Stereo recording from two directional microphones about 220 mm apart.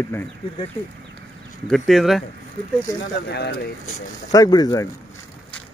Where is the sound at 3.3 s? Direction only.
50° left (ahead or behind).